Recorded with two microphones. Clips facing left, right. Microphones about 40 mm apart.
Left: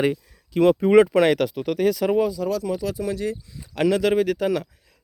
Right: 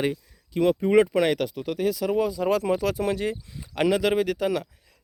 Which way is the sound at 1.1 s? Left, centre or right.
Left.